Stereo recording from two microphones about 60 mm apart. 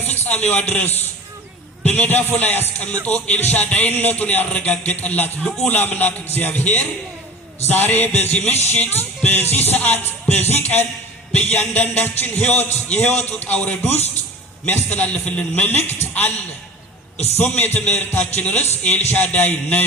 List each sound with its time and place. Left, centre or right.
0.0 s a man's voice: left
5.6 s music: left
12.5 s a man's voice: left
14.8 s a man's voice: left
15.6 s music: left
17.3 s music: left
17.8 s a man's voice: left